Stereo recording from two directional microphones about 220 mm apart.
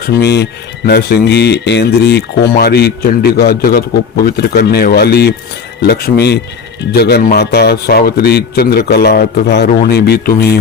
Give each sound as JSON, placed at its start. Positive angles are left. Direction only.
{"t": 0.0, "sound": "a man's voice", "side_deg": 50}